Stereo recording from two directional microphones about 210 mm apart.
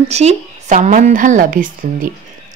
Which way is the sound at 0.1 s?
30° right (ahead or behind).